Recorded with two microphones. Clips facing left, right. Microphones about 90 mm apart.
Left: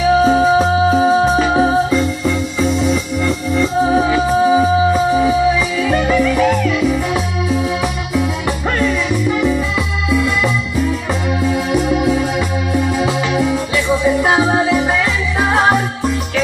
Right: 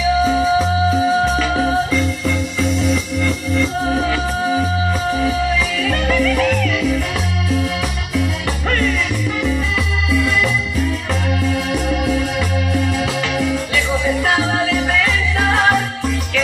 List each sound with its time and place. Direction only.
0.0 s music: 40° left (ahead or behind); by 2.0 s 25° left (ahead or behind)
2.8 s music: 15° left (ahead or behind)
5.8 s music: 15° left (ahead or behind)
10.1 s music: 15° left (ahead or behind)